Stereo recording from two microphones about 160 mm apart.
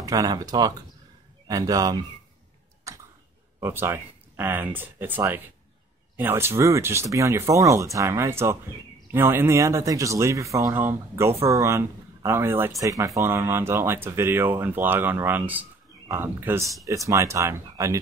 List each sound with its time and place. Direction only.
0.0 s speech: 20° right (ahead or behind)
2.9 s clicking: 20° right (ahead or behind)
3.6 s speech: 15° right (ahead or behind)